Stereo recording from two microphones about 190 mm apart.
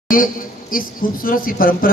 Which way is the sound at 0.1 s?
45° left (ahead or behind).